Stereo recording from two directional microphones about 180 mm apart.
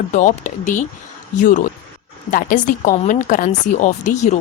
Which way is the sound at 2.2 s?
45° left (ahead or behind).